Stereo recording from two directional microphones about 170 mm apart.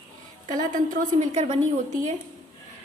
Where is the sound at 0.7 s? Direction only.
40° right (ahead or behind).